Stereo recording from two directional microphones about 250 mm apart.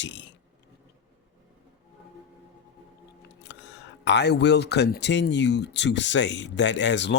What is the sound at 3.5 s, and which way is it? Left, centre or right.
Speech, left.